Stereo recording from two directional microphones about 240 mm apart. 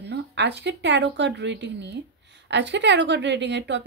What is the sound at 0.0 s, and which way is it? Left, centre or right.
A woman's voice, right.